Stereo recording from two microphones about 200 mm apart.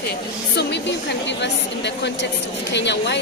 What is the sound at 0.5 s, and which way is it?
A woman's voice, 60° left (ahead or behind).